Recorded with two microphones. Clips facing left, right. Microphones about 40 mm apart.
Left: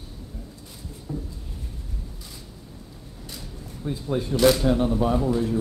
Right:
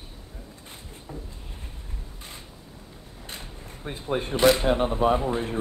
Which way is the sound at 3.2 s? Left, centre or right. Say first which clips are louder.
Even; right.